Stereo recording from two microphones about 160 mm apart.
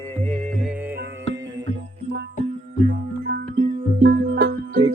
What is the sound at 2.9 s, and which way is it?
Music, 70° right (ahead or behind).